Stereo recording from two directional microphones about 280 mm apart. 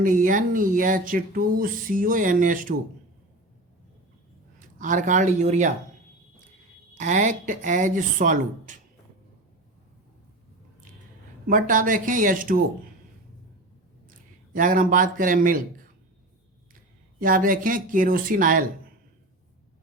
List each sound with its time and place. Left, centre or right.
0.0 s speech: right
4.8 s speech: right
6.9 s speech: right
11.4 s speech: right
14.5 s speech: right
17.2 s speech: right